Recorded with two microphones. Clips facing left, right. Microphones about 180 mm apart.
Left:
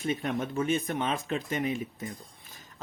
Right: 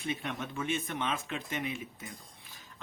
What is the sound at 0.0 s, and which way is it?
Speech, 40° left (ahead or behind).